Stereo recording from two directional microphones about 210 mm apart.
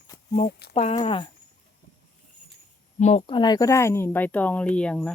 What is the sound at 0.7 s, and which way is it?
Speech, 30° left (ahead or behind).